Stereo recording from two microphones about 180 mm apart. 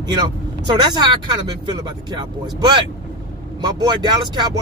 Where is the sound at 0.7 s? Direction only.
25° right (ahead or behind).